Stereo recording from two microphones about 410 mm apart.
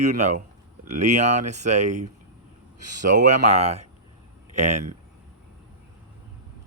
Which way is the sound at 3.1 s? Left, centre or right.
Centre.